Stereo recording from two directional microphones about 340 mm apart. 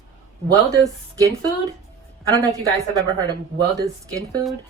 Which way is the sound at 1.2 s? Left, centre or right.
Centre.